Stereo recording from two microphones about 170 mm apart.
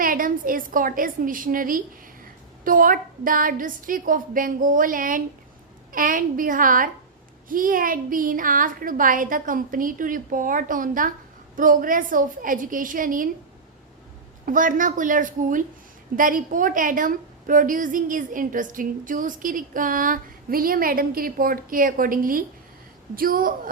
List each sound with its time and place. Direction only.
0.0 s a woman's voice: 55° right (ahead or behind)
14.4 s a woman's voice: 50° right (ahead or behind)